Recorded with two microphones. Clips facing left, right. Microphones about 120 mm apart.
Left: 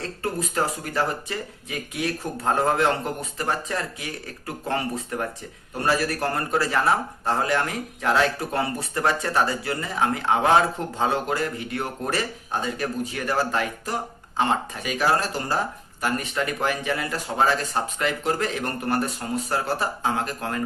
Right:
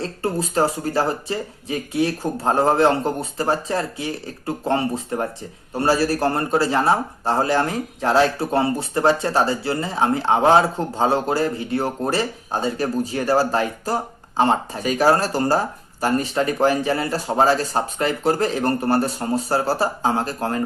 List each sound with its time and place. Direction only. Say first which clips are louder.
0.0 s a man's voice: right 5 dB; 30° right (ahead or behind)